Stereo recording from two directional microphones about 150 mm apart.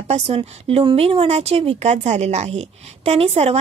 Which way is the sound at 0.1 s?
40° right (ahead or behind).